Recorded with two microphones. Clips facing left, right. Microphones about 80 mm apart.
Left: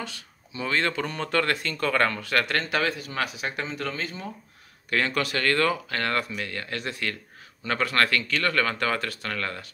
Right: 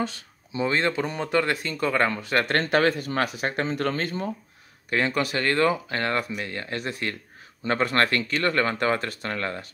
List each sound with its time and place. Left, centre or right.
0.0 s speech: right
2.4 s speech: right
4.8 s speech: right